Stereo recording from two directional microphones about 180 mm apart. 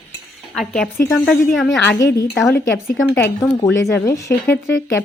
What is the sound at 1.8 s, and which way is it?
Speech, 20° left (ahead or behind).